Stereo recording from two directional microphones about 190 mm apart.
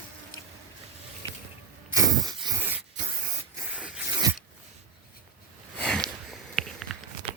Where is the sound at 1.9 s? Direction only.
20° right (ahead or behind).